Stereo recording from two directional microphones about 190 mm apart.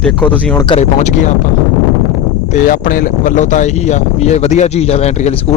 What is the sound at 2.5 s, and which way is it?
Speech, 45° left (ahead or behind).